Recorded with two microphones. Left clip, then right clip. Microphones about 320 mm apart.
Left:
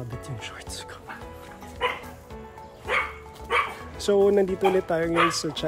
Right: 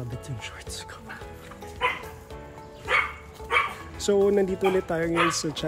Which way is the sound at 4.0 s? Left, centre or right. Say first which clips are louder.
Left 2 dB; centre.